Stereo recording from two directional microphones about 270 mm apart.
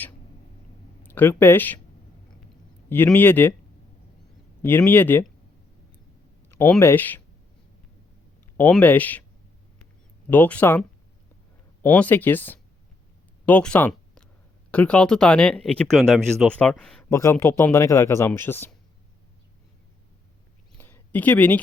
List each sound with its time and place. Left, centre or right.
1.0 s speech: centre
2.9 s speech: centre
4.6 s speech: centre
6.5 s speech: centre
8.5 s speech: centre
10.2 s speech: centre
13.4 s a sound: centre
14.7 s speech: centre
20.7 s a sound: centre